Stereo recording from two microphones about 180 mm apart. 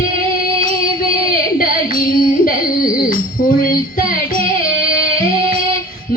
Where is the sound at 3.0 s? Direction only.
50° left (ahead or behind).